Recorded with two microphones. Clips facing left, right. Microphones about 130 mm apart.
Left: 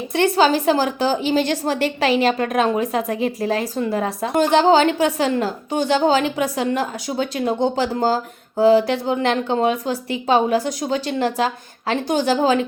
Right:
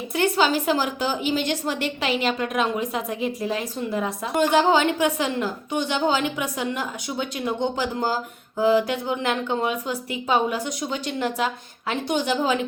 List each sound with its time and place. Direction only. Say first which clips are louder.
0.1 s a woman's voice: left 5 dB; 35° left (ahead or behind)
3.8 s speech: left 5 dB; 90° left
4.0 s a woman's voice: left 2 dB; 35° left (ahead or behind)